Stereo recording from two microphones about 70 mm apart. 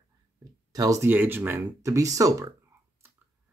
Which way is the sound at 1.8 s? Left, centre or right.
Right.